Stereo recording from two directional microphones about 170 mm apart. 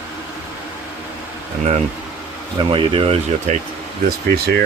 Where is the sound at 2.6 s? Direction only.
30° right (ahead or behind).